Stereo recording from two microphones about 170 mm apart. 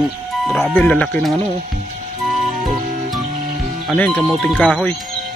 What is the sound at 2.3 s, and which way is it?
Music, centre (ahead or behind).